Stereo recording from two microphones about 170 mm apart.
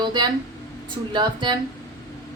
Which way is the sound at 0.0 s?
25° right (ahead or behind).